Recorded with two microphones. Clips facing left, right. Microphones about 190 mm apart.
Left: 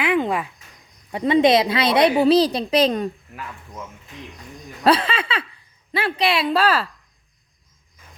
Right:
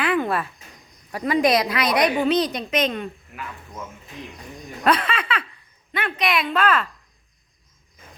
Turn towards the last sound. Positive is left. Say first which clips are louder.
# left 2 dB
turn(degrees=35)  # may be behind; listen again after turning